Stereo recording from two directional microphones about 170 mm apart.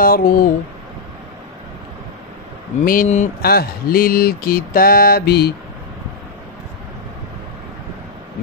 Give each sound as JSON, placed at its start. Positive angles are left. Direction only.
{"t": 0.0, "sound": "mantra", "side_deg": 55}
{"t": 2.8, "sound": "mantra", "side_deg": 55}
{"t": 3.4, "sound": "mantra", "side_deg": 65}